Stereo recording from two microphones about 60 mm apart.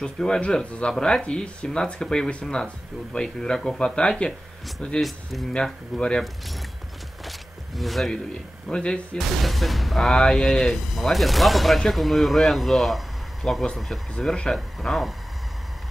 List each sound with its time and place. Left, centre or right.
0.0 s speech: centre
5.0 s speech: centre
5.5 s speech: centre
7.2 s a sound: centre
8.1 s speech: centre
9.4 s speech: centre
14.1 s speech: centre
14.5 s speech: centre